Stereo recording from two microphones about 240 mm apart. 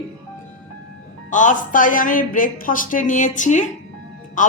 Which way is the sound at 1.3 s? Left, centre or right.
Left.